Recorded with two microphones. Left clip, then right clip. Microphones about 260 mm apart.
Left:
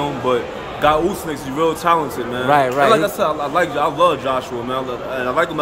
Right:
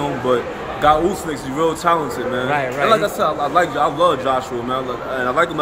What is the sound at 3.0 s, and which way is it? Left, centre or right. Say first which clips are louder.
A man's voice: even; centre.